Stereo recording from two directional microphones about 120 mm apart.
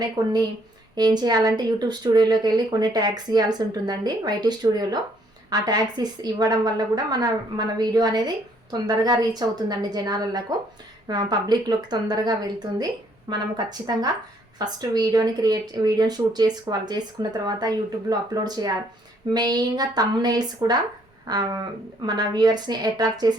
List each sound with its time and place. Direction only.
0.9 s a woman's voice: 35° right (ahead or behind)